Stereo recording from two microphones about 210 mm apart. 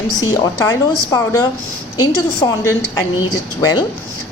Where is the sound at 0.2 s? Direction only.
15° left (ahead or behind).